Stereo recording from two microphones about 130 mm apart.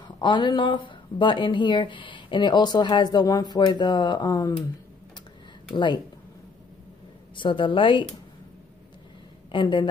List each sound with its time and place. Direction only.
0.2 s speech: 35° left (ahead or behind)
7.3 s speech: 40° left (ahead or behind)
9.5 s speech: 40° left (ahead or behind)